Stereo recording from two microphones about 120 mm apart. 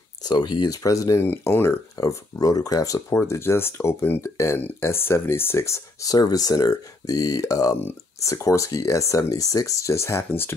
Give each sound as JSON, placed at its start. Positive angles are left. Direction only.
{"t": 0.2, "sound": "speech", "side_deg": 35}